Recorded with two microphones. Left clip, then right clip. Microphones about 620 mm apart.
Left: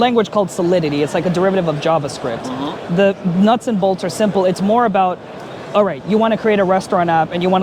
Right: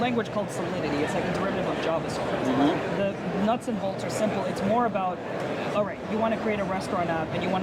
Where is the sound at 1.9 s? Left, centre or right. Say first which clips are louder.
Left 10 dB; left.